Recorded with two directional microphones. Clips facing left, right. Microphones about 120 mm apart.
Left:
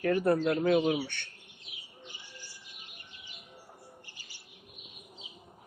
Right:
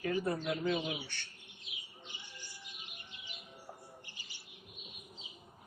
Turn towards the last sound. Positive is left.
turn(degrees=-20)  # may be behind; listen again after turning